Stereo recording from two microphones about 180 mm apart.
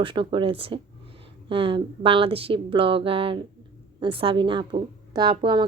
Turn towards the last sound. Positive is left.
turn(degrees=-25)  # may be behind; listen again after turning